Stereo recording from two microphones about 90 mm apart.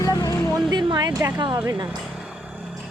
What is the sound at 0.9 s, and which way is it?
Speech, 50° right (ahead or behind).